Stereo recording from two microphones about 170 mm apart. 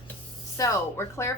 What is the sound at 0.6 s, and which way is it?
Speech, 15° left (ahead or behind).